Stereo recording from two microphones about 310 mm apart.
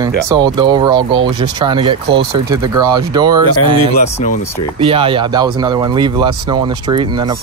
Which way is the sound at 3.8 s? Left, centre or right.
Left.